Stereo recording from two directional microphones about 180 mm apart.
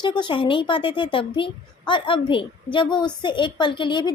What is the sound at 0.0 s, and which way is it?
A woman's voice, 25° left (ahead or behind).